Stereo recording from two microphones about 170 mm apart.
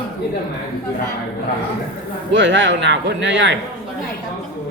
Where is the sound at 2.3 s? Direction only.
90° right.